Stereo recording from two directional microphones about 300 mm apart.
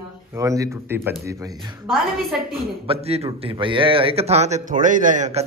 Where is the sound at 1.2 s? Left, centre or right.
Centre.